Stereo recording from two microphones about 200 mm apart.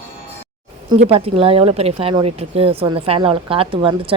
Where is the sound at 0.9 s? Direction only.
30° right (ahead or behind).